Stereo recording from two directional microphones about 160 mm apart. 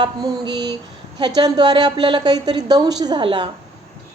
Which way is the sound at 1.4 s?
25° right (ahead or behind).